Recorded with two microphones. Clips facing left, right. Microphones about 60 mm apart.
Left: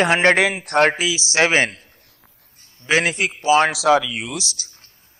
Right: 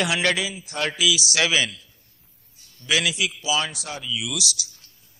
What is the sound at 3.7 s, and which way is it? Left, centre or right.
Speech, left.